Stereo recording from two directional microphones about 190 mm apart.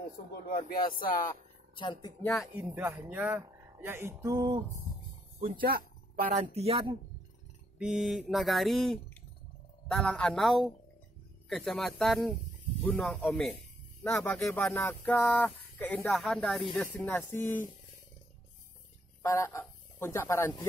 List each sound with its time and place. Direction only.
0.9 s speech: 50° left (ahead or behind)
1.8 s speech: 20° left (ahead or behind)
2.3 s speech: 5° right (ahead or behind); by 4.6 s 20° right (ahead or behind)
5.4 s speech: 50° right (ahead or behind); by 7.0 s 30° right (ahead or behind)
7.8 s mantra: centre (ahead or behind)
14.4 s speech: 15° left (ahead or behind)
19.2 s speech: 15° left (ahead or behind)